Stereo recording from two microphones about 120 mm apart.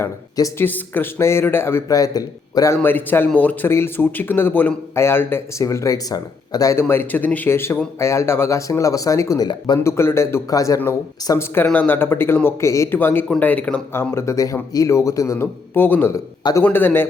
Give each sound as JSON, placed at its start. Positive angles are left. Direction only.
{"t": 0.0, "sound": "speech", "side_deg": 30}
{"t": 0.6, "sound": "a man's voice", "side_deg": 15}
{"t": 2.8, "sound": "a man's voice", "side_deg": 15}
{"t": 9.8, "sound": "a man's voice", "side_deg": 20}